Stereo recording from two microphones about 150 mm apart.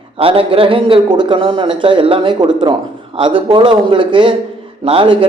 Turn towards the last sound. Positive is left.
turn(degrees=-35)  # may be behind; listen again after turning